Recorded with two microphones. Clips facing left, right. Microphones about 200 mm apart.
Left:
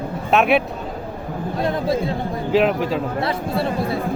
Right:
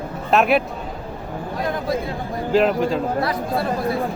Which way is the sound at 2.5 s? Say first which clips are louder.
Right 1 dB; centre (ahead or behind).